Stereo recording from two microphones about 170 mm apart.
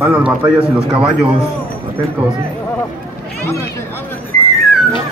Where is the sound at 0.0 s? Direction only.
15° right (ahead or behind).